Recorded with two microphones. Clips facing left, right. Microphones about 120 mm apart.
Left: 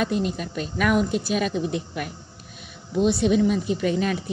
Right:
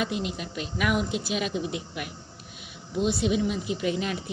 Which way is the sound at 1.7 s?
10° right (ahead or behind).